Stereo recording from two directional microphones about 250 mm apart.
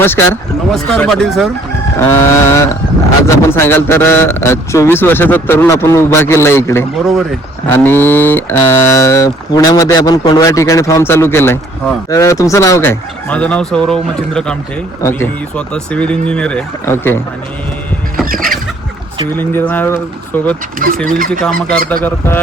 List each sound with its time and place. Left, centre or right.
0.7 s speech: centre
6.9 s speech: centre
18.3 s a sound: right
19.4 s speech: centre
20.7 s speech: right